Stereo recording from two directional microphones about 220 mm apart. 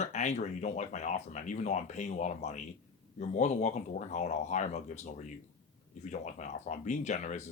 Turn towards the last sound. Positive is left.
turn(degrees=35)  # may be behind; listen again after turning